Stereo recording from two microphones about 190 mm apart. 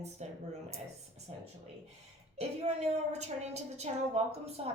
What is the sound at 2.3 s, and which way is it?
A woman's voice, 35° right (ahead or behind).